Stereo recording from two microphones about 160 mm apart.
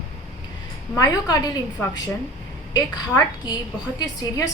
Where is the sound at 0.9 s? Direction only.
25° left (ahead or behind).